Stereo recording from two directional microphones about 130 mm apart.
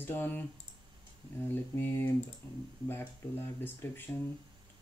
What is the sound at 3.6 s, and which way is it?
Speech, 15° left (ahead or behind).